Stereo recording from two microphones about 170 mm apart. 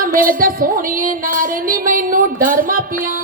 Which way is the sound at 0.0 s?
55° right (ahead or behind).